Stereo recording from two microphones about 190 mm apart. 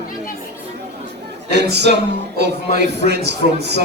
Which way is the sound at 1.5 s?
60° right (ahead or behind).